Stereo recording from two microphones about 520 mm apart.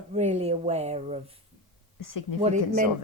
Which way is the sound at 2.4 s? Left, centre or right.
Centre.